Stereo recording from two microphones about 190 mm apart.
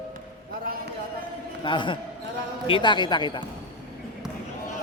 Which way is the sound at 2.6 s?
25° left (ahead or behind).